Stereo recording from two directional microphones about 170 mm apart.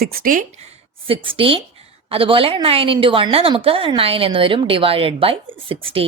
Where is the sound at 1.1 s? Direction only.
30° right (ahead or behind).